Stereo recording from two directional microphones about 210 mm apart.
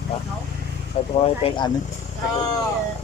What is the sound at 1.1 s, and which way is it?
Speech, 25° left (ahead or behind).